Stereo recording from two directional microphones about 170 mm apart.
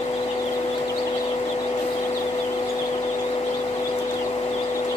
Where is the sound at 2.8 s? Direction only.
30° left (ahead or behind).